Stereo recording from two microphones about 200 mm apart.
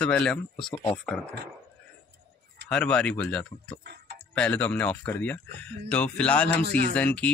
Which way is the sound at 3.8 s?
55° right (ahead or behind).